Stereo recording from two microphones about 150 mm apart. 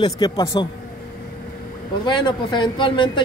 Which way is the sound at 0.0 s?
30° left (ahead or behind).